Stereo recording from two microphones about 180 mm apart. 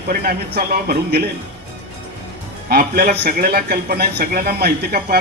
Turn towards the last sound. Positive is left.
turn(degrees=-60)  # may be behind; listen again after turning